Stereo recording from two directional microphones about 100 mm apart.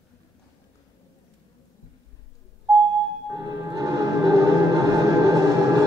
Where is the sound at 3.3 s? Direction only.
40° right (ahead or behind).